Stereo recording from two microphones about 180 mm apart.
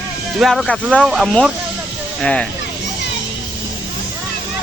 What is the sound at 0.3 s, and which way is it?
Speech, centre (ahead or behind).